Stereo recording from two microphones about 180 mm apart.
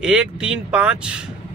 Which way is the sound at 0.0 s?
5° right (ahead or behind).